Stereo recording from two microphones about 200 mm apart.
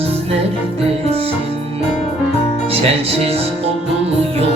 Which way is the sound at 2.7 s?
30° right (ahead or behind).